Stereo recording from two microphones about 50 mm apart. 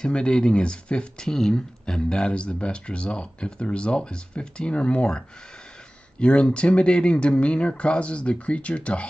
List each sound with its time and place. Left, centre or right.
0.0 s speech: centre